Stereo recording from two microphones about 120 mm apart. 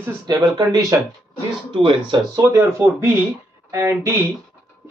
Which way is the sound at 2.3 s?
20° right (ahead or behind).